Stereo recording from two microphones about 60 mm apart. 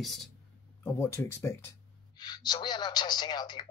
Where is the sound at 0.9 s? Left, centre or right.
Left.